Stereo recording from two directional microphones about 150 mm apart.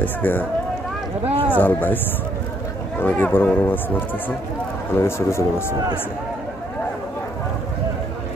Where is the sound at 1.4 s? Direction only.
10° left (ahead or behind).